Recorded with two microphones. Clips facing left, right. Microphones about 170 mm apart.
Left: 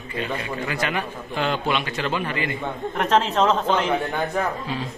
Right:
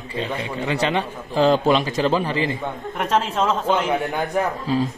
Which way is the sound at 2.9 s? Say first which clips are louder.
Left 1 dB; 10° right (ahead or behind).